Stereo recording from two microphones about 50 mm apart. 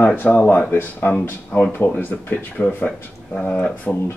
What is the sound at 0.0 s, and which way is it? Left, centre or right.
Speech, left.